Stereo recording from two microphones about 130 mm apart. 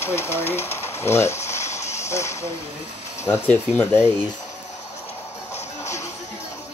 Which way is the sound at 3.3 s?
10° left (ahead or behind).